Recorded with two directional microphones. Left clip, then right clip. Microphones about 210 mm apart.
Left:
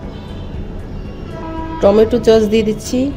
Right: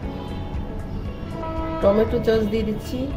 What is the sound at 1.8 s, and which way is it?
Speech, 35° left (ahead or behind).